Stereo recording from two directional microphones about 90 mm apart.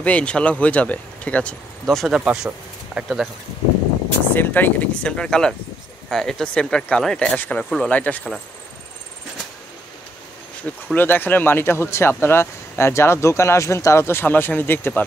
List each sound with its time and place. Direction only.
0.0 s speech: 15° left (ahead or behind)
2.1 s speech: 10° right (ahead or behind)
4.3 s speech: 20° left (ahead or behind)
10.7 s speech: 15° left (ahead or behind)